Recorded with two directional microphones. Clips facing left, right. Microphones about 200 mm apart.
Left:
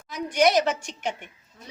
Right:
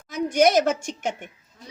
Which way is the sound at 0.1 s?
50° right (ahead or behind).